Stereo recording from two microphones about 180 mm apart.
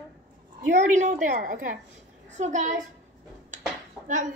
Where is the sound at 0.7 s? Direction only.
45° right (ahead or behind).